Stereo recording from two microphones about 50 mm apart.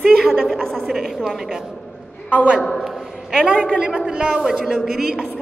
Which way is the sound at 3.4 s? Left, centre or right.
Centre.